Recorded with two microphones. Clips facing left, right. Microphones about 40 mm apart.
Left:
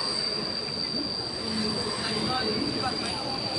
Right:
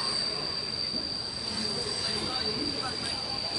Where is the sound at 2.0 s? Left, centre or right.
Left.